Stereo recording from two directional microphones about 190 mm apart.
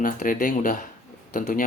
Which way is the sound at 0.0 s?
45° left (ahead or behind).